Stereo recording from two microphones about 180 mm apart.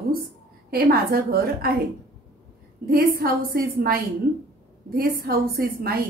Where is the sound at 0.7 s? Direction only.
55° right (ahead or behind).